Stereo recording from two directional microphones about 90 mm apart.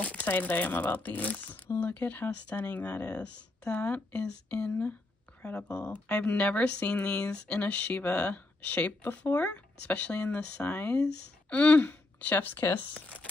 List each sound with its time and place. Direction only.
0.0 s speech: 15° left (ahead or behind)